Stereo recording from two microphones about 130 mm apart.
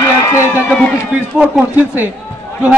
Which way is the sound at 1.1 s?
10° right (ahead or behind).